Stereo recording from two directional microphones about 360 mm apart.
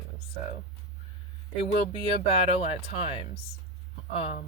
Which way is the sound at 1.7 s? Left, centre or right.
Centre.